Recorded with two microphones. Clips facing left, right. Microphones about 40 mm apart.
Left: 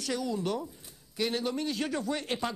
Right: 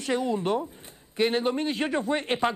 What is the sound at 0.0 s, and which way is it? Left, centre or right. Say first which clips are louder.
A man's voice: right 5 dB; right.